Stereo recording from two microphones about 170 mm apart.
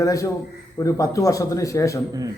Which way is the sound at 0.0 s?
20° left (ahead or behind).